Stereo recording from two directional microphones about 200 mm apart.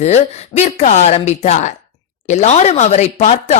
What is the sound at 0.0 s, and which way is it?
Speech, 35° left (ahead or behind).